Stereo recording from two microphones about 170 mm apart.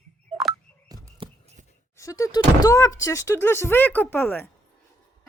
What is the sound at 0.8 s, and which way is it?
Frog, 20° right (ahead or behind).